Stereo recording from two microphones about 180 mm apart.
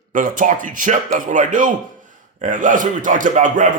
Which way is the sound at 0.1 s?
45° right (ahead or behind).